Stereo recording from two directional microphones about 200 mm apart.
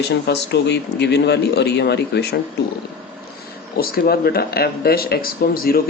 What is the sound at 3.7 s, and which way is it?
Speech, 50° left (ahead or behind).